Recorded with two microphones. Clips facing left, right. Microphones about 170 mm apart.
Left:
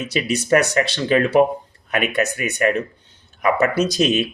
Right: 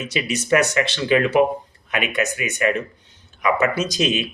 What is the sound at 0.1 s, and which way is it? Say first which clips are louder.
Speech: left 2 dB; 35° left (ahead or behind).